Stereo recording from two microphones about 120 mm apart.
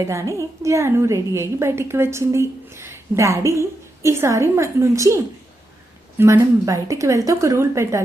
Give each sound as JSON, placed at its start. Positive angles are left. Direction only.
{"t": 0.0, "sound": "a woman's voice", "side_deg": -25}